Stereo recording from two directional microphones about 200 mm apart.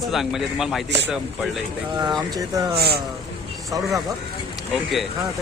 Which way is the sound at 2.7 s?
55° right (ahead or behind).